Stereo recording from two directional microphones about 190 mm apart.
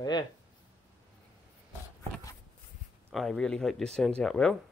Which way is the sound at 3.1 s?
Centre (ahead or behind).